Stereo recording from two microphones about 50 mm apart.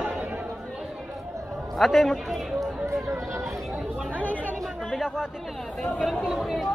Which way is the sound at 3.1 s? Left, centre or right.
Right.